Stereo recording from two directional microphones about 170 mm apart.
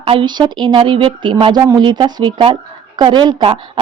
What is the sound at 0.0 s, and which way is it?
Speech, 30° right (ahead or behind).